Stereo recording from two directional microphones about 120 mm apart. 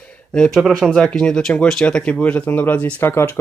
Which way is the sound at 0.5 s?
5° right (ahead or behind).